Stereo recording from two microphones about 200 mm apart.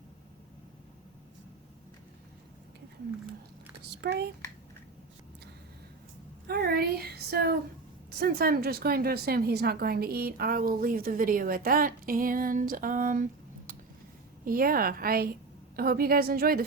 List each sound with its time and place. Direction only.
4.0 s a child's voice: 55° right (ahead or behind)
6.5 s a woman's voice: 50° right (ahead or behind)
14.4 s a woman's voice: 45° right (ahead or behind)